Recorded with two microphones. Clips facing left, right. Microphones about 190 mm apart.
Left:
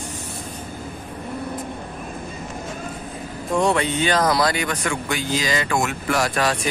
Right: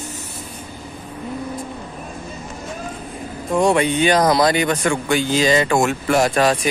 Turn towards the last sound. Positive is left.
turn(degrees=-25)  # may be behind; listen again after turning